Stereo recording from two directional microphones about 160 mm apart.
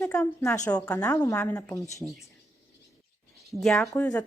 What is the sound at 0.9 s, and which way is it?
Speech, 20° left (ahead or behind).